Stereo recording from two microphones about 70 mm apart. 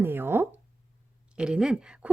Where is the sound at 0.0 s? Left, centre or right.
Right.